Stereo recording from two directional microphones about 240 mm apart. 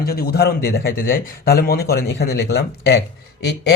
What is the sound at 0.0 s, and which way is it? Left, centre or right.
A man's voice, left.